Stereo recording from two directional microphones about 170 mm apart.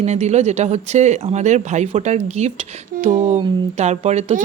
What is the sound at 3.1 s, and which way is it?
Speech, 50° right (ahead or behind).